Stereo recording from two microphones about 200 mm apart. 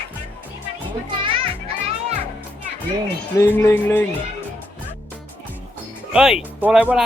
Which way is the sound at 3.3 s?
10° left (ahead or behind).